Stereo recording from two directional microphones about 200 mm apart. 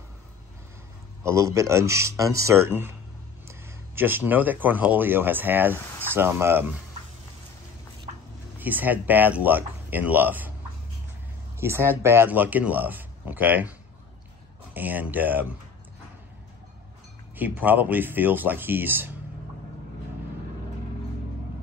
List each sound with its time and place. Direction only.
1.2 s a man's voice: 15° right (ahead or behind)
8.5 s a man's voice: 10° right (ahead or behind)
11.6 s a man's voice: 10° right (ahead or behind)
17.4 s a man's voice: 10° right (ahead or behind)